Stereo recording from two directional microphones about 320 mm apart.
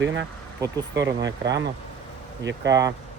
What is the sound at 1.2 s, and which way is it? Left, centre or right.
Speech, right.